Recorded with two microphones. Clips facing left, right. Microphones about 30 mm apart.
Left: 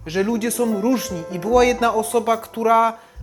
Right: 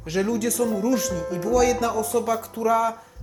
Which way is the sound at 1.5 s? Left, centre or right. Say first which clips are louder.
Left 5 dB; left.